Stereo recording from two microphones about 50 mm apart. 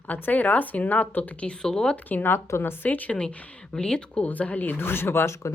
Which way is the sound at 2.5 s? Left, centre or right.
Left.